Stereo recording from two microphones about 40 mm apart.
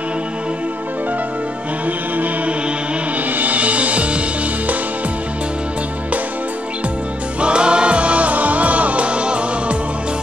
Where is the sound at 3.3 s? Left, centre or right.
Right.